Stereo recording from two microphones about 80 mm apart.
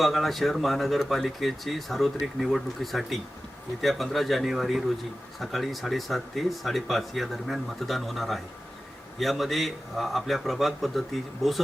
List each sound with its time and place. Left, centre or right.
0.0 s speech: centre